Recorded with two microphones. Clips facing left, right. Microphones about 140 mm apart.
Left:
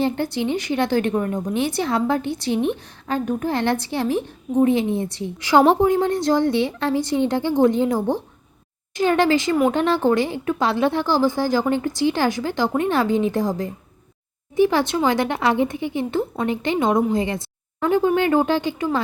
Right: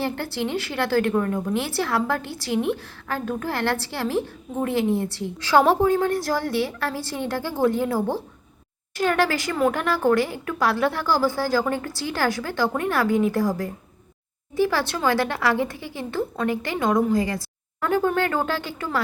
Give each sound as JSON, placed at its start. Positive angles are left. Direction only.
{"t": 0.0, "sound": "a woman's voice", "side_deg": 20}